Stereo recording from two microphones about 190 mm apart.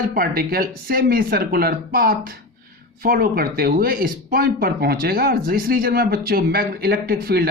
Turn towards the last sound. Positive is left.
turn(degrees=-55)  # may be behind; listen again after turning